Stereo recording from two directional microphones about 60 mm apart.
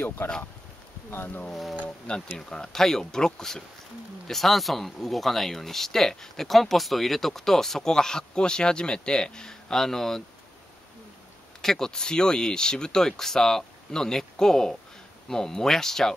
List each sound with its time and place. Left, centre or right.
0.2 s speech: left
1.5 s speech: centre
1.9 s speech: centre
11.6 s speech: centre